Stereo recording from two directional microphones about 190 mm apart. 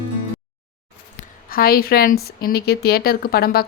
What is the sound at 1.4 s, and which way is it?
A woman's voice, 50° left (ahead or behind).